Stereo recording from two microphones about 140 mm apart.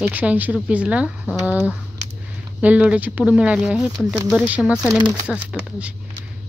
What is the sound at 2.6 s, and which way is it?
Speech, 10° right (ahead or behind).